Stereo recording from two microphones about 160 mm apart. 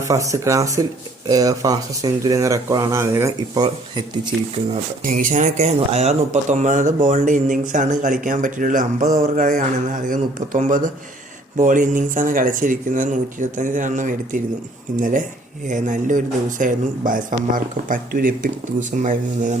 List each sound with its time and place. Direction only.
0.1 s speech: 20° right (ahead or behind)
5.0 s speech: 60° right (ahead or behind)